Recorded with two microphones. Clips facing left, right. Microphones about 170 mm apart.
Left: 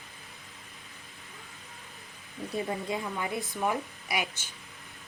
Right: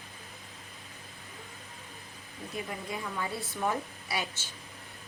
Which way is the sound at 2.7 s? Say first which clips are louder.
Left 5 dB; 20° left (ahead or behind).